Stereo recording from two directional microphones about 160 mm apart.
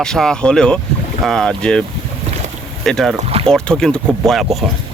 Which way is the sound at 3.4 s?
5° left (ahead or behind).